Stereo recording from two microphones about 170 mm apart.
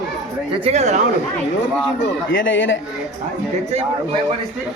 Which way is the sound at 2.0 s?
90° left.